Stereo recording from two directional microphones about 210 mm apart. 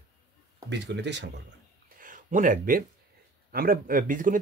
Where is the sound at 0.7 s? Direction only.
55° right (ahead or behind).